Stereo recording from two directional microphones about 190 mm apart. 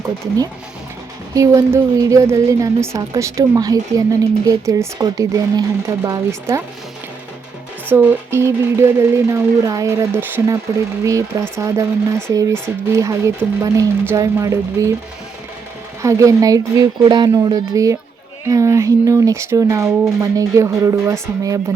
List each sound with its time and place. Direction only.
1.3 s a woman's voice: 15° right (ahead or behind)
7.9 s a woman's voice: 10° right (ahead or behind)
16.0 s a woman's voice: 15° right (ahead or behind)